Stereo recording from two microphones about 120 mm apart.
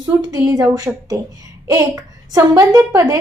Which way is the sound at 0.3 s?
25° right (ahead or behind).